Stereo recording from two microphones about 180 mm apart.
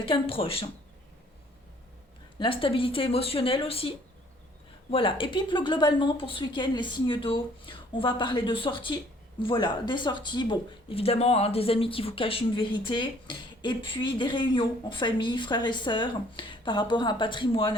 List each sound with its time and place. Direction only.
0.0 s speech: 30° left (ahead or behind)
2.4 s speech: 30° left (ahead or behind)